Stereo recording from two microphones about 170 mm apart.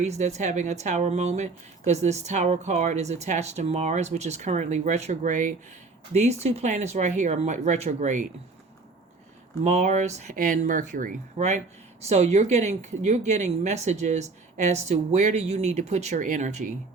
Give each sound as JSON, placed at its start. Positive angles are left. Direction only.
{"t": 0.0, "sound": "a woman's voice", "side_deg": -40}
{"t": 9.6, "sound": "a woman's voice", "side_deg": -45}